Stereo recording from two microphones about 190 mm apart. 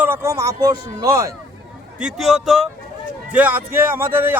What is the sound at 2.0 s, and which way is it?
A man's voice, 5° right (ahead or behind).